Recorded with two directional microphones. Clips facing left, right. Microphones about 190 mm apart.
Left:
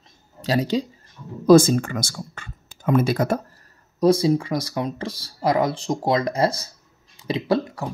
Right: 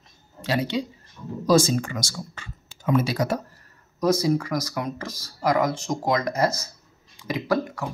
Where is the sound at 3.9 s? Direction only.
30° left (ahead or behind).